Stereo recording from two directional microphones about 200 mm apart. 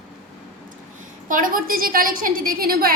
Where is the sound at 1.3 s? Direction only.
45° right (ahead or behind).